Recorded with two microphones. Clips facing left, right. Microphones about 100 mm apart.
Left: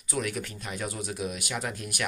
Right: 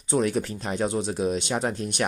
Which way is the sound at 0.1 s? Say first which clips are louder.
Right 8 dB; 30° right (ahead or behind).